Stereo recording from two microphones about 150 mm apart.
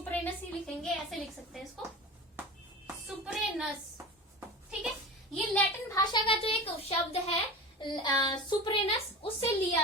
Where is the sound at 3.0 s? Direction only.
5° right (ahead or behind).